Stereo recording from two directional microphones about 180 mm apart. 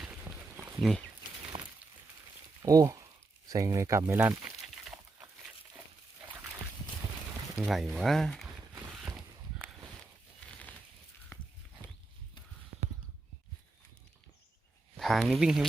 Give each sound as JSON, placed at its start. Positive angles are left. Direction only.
{"t": 0.0, "sound": "a sound", "side_deg": -5}
{"t": 0.8, "sound": "speech", "side_deg": 0}
{"t": 1.5, "sound": "breaking", "side_deg": -40}
{"t": 2.6, "sound": "a sound", "side_deg": -20}
{"t": 3.5, "sound": "speech", "side_deg": -20}
{"t": 7.5, "sound": "speech", "side_deg": 0}
{"t": 14.9, "sound": "speech", "side_deg": 0}